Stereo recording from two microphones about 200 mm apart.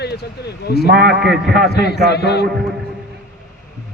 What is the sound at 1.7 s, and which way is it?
Speech, 55° left (ahead or behind).